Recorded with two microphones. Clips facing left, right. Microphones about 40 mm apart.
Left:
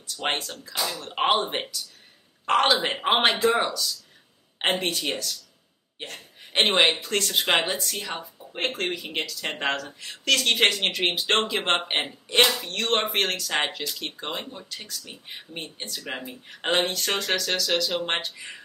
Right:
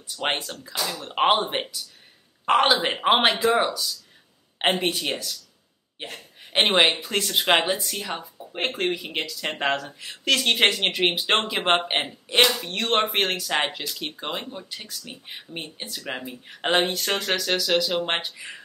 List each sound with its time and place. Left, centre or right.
0.0 s speech: centre